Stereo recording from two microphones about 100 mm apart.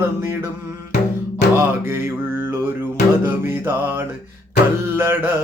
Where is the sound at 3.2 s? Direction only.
25° right (ahead or behind).